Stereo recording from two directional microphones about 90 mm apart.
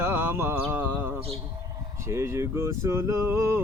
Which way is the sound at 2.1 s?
30° right (ahead or behind).